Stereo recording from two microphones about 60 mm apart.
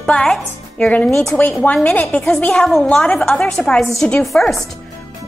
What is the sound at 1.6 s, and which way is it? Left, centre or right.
Speech, left.